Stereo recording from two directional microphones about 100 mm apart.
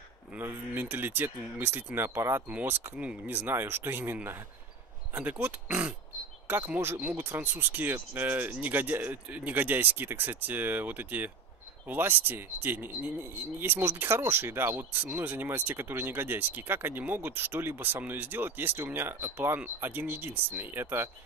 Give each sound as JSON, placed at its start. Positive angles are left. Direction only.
{"t": 0.4, "sound": "speech", "side_deg": -20}